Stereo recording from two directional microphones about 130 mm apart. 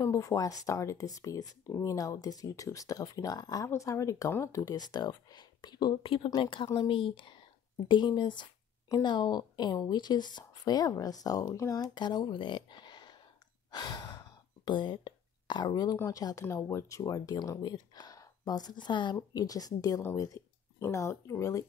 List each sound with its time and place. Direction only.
0.0 s speech: 25° left (ahead or behind)
13.7 s gasp: 30° left (ahead or behind)
16.0 s speech: 25° left (ahead or behind)